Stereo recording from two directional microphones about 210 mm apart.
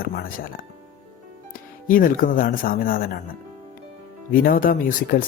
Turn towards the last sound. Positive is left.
turn(degrees=45)  # may be behind; listen again after turning